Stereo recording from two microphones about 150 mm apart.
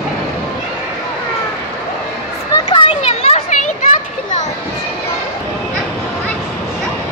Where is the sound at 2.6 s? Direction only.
35° left (ahead or behind).